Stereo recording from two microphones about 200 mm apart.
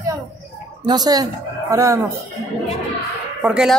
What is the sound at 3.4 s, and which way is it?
Speech, 5° right (ahead or behind).